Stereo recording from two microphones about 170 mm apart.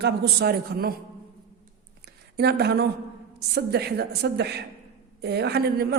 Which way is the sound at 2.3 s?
70° right (ahead or behind).